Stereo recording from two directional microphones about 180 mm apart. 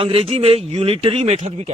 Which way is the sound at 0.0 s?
30° right (ahead or behind).